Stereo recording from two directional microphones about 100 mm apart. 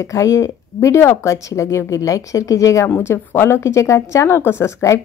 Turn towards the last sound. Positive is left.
turn(degrees=30)  # may be behind; listen again after turning